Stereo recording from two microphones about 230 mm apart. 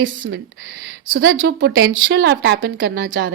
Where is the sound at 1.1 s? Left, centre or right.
Right.